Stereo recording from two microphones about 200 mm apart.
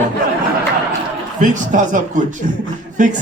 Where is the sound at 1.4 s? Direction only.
40° right (ahead or behind).